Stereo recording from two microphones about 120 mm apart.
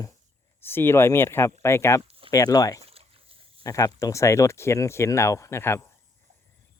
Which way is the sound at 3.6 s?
25° left (ahead or behind).